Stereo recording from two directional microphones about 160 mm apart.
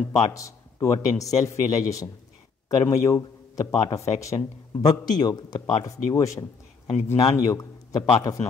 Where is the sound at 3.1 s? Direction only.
20° left (ahead or behind).